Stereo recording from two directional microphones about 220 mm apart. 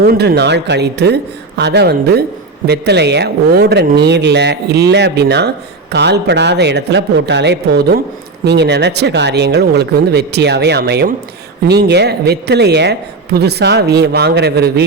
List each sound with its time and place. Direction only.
0.0 s speech: 45° right (ahead or behind)